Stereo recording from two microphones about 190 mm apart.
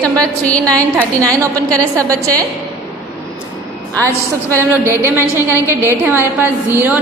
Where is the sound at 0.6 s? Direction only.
15° right (ahead or behind).